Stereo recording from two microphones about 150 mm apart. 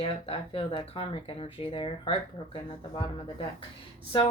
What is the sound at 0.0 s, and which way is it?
Speech, 35° left (ahead or behind).